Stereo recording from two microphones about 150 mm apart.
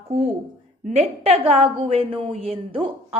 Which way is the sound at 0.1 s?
45° right (ahead or behind).